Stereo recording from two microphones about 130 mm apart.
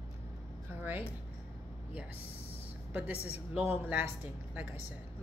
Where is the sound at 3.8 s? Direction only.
15° right (ahead or behind).